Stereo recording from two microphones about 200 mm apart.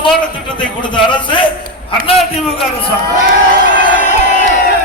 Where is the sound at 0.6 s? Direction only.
25° left (ahead or behind).